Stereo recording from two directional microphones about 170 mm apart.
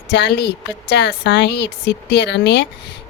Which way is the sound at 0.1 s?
90° left.